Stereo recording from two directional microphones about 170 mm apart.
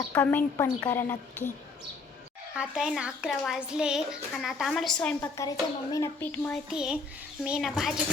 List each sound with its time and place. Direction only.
0.1 s a child's voice: 10° left (ahead or behind)
2.6 s a woman's voice: 5° right (ahead or behind)
5.4 s a child's voice: 20° left (ahead or behind)
6.7 s a woman's voice: 5° right (ahead or behind)